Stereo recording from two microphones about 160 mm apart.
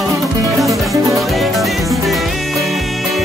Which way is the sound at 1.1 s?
Centre (ahead or behind).